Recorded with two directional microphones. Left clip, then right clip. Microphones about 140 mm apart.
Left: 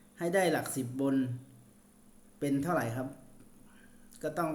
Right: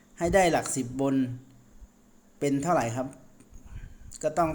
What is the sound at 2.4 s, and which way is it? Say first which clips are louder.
Speech: right 6 dB; 40° right (ahead or behind).